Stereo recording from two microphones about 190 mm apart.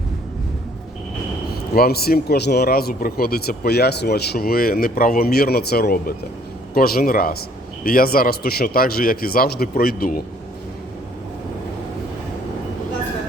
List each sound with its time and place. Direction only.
1.7 s speech: 55° left (ahead or behind)